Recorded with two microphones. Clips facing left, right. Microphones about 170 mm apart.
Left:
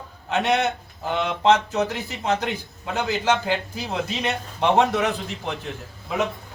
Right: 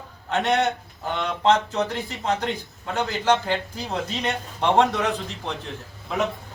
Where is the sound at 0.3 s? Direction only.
10° left (ahead or behind).